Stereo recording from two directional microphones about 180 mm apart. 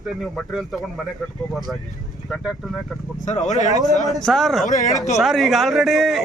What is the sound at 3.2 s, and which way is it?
Speech, 40° left (ahead or behind).